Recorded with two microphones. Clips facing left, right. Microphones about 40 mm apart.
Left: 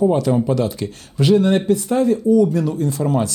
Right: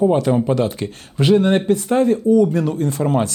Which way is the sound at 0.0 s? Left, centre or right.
Right.